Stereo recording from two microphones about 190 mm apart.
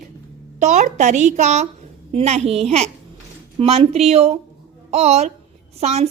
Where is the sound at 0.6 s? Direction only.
40° right (ahead or behind).